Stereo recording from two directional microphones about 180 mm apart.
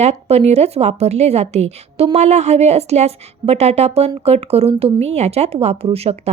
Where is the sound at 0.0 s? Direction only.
35° right (ahead or behind).